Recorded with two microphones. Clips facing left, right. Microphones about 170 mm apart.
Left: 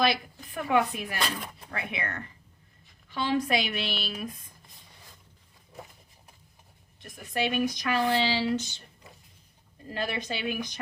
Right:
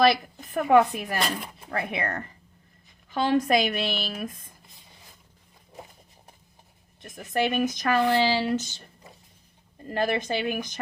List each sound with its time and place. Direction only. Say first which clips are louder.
0.0 s a woman's voice: right 6 dB; 45° right (ahead or behind)
7.3 s a woman's voice: right 3 dB; 50° right (ahead or behind)
9.9 s a woman's voice: right 7 dB; 50° right (ahead or behind)